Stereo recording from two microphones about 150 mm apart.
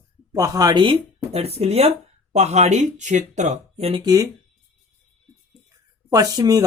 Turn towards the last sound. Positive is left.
turn(degrees=-25)  # may be behind; listen again after turning